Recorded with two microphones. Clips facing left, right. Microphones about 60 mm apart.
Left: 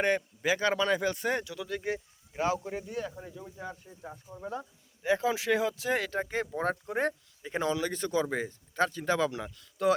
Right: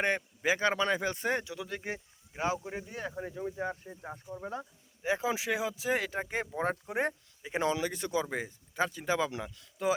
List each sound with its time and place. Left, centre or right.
0.0 s speech: right
2.9 s speech: right
4.4 s speech: centre